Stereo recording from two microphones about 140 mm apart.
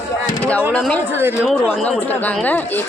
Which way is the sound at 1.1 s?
15° right (ahead or behind).